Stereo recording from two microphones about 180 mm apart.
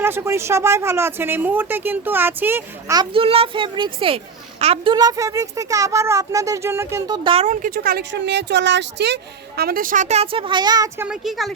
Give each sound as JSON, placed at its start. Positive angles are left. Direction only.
{"t": 0.0, "sound": "speech", "side_deg": -10}
{"t": 3.0, "sound": "a child's voice", "side_deg": -30}
{"t": 7.4, "sound": "speech", "side_deg": -45}